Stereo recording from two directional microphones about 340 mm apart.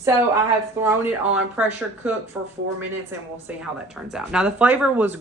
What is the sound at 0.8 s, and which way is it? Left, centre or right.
Speech, centre.